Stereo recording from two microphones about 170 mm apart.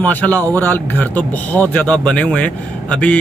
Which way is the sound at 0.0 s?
10° left (ahead or behind).